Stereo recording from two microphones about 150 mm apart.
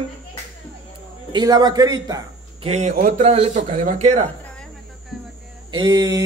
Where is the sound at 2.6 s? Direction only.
45° right (ahead or behind).